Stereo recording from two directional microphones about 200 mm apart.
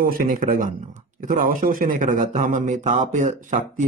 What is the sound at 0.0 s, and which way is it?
A man's voice, 45° right (ahead or behind).